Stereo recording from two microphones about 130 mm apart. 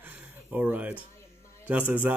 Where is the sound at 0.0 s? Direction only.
15° right (ahead or behind).